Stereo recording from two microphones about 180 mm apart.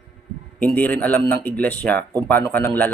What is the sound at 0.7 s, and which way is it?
Speech, 10° left (ahead or behind).